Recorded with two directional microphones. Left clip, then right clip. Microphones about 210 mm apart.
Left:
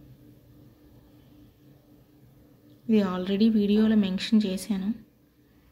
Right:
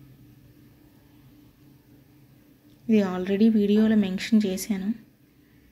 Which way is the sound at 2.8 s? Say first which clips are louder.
Right 2 dB; 10° right (ahead or behind).